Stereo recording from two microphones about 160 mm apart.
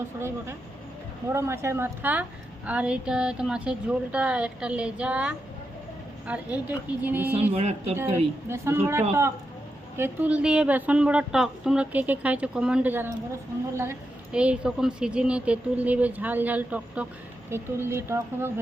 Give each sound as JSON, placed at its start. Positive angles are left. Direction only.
{"t": 0.2, "sound": "speech", "side_deg": -15}
{"t": 7.5, "sound": "speech", "side_deg": -40}
{"t": 7.9, "sound": "speech", "side_deg": -15}
{"t": 10.0, "sound": "speech", "side_deg": -10}
{"t": 14.3, "sound": "speech", "side_deg": -5}